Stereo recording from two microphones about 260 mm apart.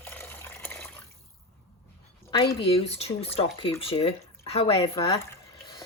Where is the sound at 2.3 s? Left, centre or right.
Centre.